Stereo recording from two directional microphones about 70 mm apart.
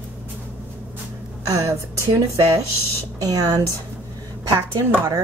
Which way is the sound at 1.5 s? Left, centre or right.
Right.